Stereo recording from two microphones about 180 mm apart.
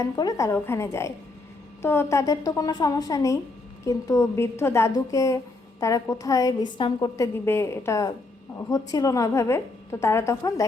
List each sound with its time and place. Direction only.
0.0 s a woman's voice: 20° left (ahead or behind)